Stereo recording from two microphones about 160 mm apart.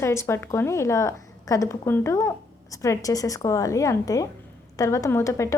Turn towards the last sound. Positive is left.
turn(degrees=20)  # may be behind; listen again after turning